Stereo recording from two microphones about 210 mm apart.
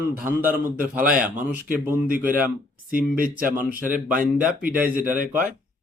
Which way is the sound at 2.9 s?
40° right (ahead or behind).